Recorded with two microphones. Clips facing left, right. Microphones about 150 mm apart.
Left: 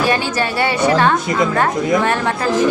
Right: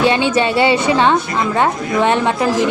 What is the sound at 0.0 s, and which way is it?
A woman's voice, 25° right (ahead or behind).